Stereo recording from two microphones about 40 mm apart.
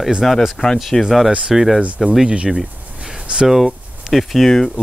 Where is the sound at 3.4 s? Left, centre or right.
Centre.